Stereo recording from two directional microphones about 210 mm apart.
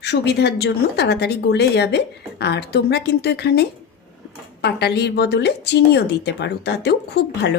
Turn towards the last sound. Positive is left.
turn(degrees=50)  # may be behind; listen again after turning